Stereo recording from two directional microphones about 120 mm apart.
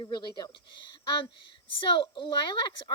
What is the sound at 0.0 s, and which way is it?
Speech, 35° left (ahead or behind).